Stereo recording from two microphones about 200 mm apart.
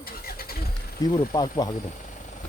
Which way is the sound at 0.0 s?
50° left (ahead or behind).